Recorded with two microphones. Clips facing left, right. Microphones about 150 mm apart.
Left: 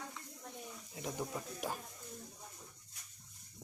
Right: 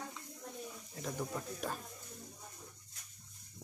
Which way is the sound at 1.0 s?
15° left (ahead or behind).